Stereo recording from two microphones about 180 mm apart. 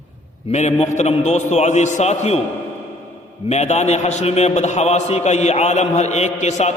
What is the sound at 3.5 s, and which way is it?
A man's voice, 40° left (ahead or behind).